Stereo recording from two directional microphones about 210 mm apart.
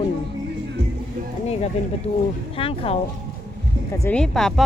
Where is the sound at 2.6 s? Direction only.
25° left (ahead or behind).